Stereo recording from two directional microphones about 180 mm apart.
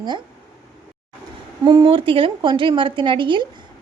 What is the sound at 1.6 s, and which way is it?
Speech, 25° right (ahead or behind).